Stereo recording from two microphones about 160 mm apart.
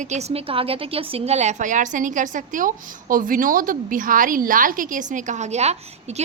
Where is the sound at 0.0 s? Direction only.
45° right (ahead or behind).